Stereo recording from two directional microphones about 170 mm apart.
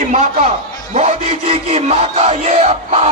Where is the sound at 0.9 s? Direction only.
40° right (ahead or behind).